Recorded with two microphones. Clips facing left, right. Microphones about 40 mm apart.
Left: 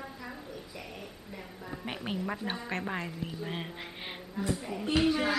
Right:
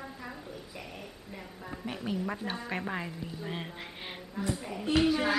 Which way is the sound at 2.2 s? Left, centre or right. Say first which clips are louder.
Even; centre.